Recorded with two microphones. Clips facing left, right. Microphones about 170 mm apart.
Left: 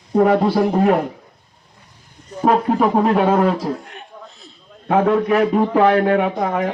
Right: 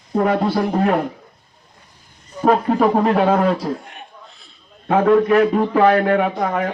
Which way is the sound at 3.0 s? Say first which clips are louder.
Left 1 dB; 5° left (ahead or behind).